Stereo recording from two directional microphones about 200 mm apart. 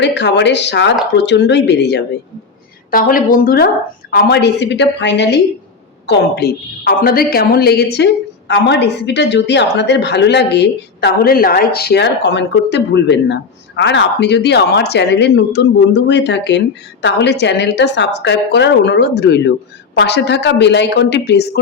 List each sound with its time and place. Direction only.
0.0 s a woman's voice: 60° left (ahead or behind)
2.9 s a woman's voice: 45° left (ahead or behind)